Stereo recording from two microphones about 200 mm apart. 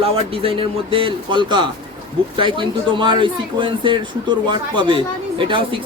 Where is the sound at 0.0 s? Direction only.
25° right (ahead or behind).